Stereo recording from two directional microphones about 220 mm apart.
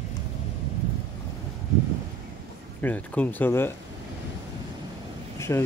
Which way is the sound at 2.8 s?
5° left (ahead or behind).